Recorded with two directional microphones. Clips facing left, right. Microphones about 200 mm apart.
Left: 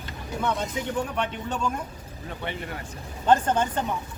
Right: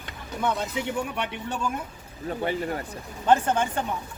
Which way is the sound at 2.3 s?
40° right (ahead or behind).